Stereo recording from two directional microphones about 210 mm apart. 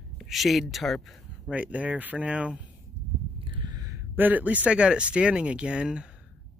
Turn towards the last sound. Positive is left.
turn(degrees=-5)  # may be behind; listen again after turning